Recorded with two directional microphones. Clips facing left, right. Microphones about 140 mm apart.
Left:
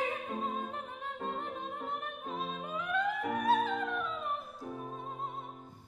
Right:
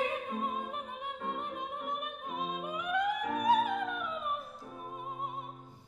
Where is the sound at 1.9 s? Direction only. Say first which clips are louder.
Right 1 dB; 15° right (ahead or behind).